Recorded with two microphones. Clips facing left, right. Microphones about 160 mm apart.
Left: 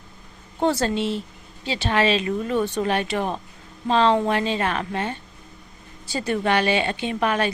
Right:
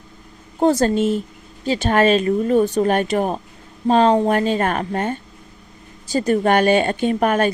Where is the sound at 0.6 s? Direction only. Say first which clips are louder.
Right 6 dB; 45° right (ahead or behind).